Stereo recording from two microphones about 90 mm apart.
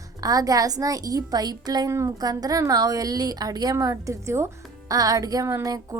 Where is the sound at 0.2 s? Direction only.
40° right (ahead or behind).